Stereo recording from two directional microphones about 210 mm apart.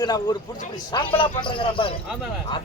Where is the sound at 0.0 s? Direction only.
20° left (ahead or behind).